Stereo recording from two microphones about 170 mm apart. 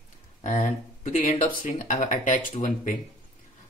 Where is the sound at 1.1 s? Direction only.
35° left (ahead or behind).